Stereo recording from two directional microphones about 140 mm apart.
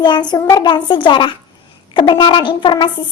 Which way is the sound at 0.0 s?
30° left (ahead or behind).